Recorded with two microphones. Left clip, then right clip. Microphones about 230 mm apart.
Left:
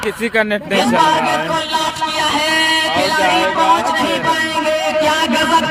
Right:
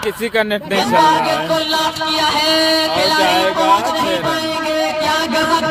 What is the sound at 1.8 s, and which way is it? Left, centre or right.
Music, right.